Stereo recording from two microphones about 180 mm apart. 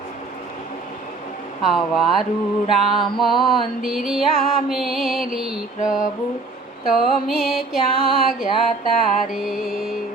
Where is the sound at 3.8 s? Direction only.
Centre (ahead or behind).